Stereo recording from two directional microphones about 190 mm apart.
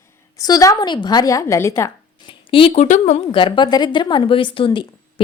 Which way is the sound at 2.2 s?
25° left (ahead or behind).